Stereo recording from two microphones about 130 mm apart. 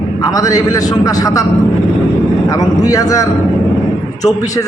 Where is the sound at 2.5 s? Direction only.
25° left (ahead or behind).